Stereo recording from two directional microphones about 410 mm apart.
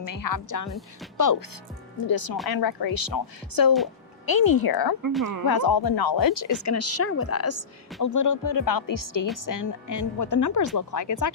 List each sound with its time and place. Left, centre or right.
0.0 s speech: left
2.0 s speech: left
8.0 s speech: left